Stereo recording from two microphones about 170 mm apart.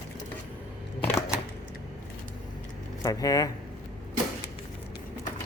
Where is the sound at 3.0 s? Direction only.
20° left (ahead or behind).